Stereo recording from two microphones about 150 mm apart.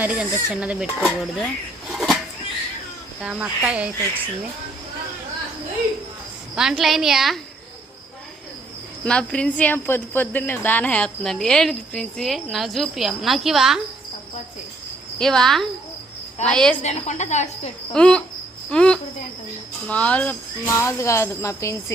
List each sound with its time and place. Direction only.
0.0 s speech: 10° right (ahead or behind)
1.9 s a sound: centre (ahead or behind)
3.2 s speech: 10° right (ahead or behind)
6.6 s speech: centre (ahead or behind)
9.0 s speech: 5° left (ahead or behind)
15.2 s speech: 5° left (ahead or behind)
16.8 s speech: 50° left (ahead or behind)
17.9 s speech: 5° left (ahead or behind)
18.7 s cricket: 5° left (ahead or behind)
19.9 s speech: 10° left (ahead or behind)
20.7 s speech: 20° left (ahead or behind)